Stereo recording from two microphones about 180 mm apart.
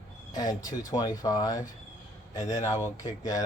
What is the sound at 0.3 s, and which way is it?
Speech, 20° left (ahead or behind).